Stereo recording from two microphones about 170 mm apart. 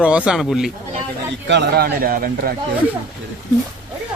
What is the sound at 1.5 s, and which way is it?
A man's voice, 80° right.